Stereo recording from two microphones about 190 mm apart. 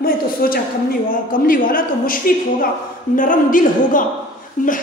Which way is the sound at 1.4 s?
45° left (ahead or behind).